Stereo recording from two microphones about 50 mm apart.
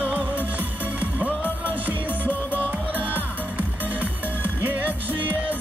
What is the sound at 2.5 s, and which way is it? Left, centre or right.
Music, right.